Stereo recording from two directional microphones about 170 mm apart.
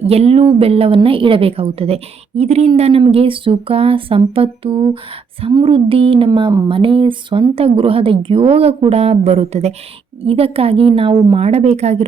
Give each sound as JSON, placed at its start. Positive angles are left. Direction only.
{"t": 0.0, "sound": "a woman's voice", "side_deg": -35}